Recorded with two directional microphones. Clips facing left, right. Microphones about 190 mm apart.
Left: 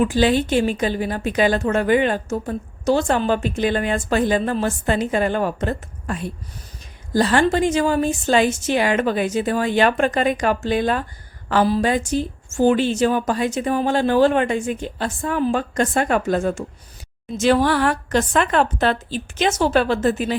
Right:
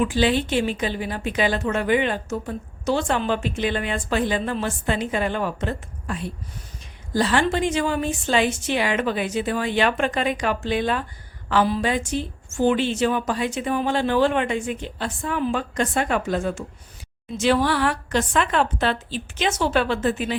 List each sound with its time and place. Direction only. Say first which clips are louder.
0.0 s a woman's voice: left 3 dB; 45° left (ahead or behind)